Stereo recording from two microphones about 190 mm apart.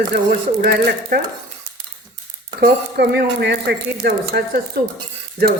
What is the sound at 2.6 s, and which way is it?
Speech, 55° right (ahead or behind).